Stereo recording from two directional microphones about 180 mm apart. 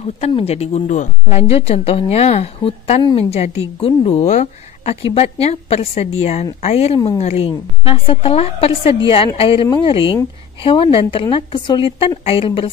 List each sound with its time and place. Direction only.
0.0 s a woman's voice: 35° left (ahead or behind)